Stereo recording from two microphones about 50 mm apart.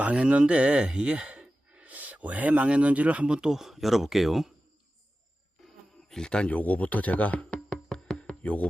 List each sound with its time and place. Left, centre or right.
0.0 s speech: right
3.2 s speech: centre
5.6 s insect: centre
6.5 s speech: left
7.9 s music: centre
8.1 s music: left